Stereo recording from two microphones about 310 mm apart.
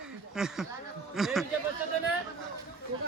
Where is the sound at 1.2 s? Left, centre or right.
Centre.